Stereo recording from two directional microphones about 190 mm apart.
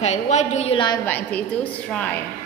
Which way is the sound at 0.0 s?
35° left (ahead or behind).